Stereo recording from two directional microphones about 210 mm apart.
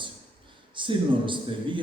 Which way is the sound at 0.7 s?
25° right (ahead or behind).